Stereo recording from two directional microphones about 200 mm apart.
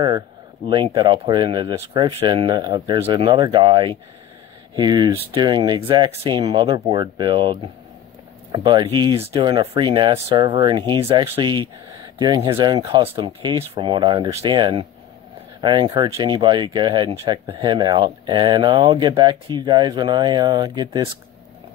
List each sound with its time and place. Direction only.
0.7 s speech: 25° right (ahead or behind)